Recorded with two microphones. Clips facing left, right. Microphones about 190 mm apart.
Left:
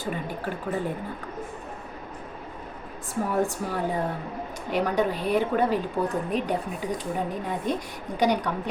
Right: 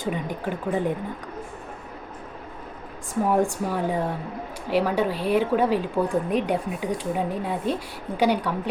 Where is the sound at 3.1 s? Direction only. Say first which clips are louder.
Right 4 dB; 15° right (ahead or behind).